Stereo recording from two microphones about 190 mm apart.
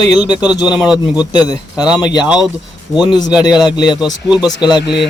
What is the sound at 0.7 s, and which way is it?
Speech, 5° right (ahead or behind).